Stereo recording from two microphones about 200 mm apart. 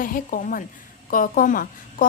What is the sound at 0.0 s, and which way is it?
A woman's voice, 45° left (ahead or behind).